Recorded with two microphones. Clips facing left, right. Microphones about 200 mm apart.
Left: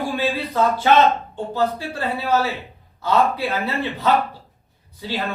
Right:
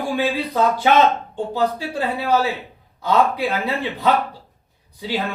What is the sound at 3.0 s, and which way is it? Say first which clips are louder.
Speech: right 1 dB; 15° right (ahead or behind).